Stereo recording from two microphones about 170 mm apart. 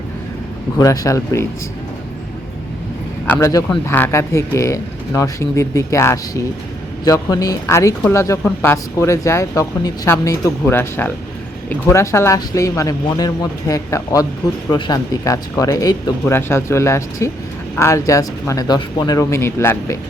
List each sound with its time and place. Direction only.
0.8 s speech: 20° left (ahead or behind)
3.2 s speech: 20° left (ahead or behind)